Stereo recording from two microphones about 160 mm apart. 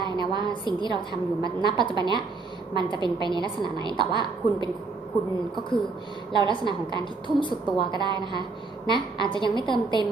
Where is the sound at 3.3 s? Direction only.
30° left (ahead or behind).